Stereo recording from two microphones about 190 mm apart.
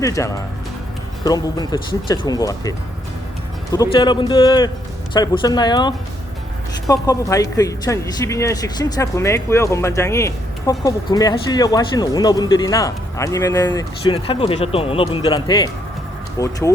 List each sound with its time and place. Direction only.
0.0 s speech: 15° left (ahead or behind)
14.1 s speech: 30° left (ahead or behind)